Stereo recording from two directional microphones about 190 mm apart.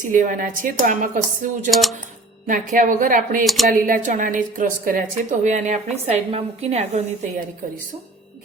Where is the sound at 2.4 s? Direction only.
45° right (ahead or behind).